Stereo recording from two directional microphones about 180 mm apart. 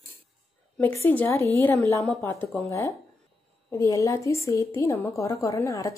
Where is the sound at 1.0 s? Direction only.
10° left (ahead or behind).